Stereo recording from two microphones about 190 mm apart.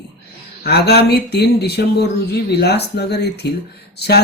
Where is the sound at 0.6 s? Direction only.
60° left (ahead or behind).